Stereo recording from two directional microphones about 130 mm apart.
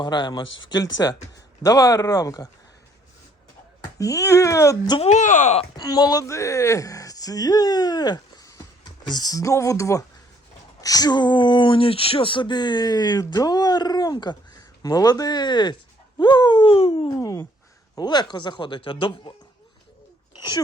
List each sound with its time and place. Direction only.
0.0 s speech: 35° left (ahead or behind)
3.9 s speech: 25° left (ahead or behind)
4.9 s speech: 60° left (ahead or behind)
5.7 s speech: 30° left (ahead or behind); by 17.1 s 45° left (ahead or behind)
17.1 s speech: 30° left (ahead or behind)